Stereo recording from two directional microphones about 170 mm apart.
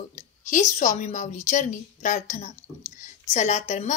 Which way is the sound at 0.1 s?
45° left (ahead or behind).